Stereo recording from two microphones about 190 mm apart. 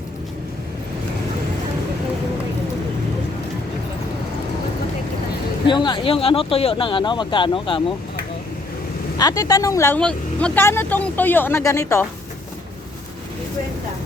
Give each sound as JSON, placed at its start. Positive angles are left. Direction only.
{"t": 5.6, "sound": "speech", "side_deg": 25}
{"t": 9.1, "sound": "speech", "side_deg": 20}